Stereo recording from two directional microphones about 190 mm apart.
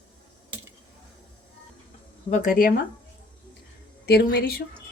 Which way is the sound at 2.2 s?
40° left (ahead or behind).